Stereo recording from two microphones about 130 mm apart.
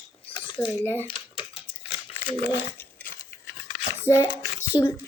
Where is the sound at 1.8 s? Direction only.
45° left (ahead or behind).